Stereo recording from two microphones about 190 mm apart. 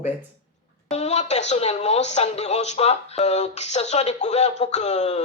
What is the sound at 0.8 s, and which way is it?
A woman's voice, 35° left (ahead or behind).